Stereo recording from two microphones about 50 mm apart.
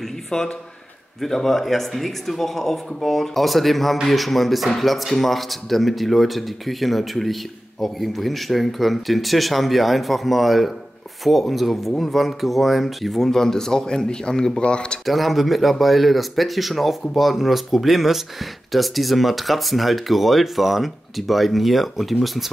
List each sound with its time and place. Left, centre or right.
0.3 s speech: centre
15.0 s speech: centre